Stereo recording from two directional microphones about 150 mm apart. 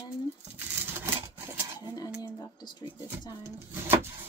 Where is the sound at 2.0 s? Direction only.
25° left (ahead or behind).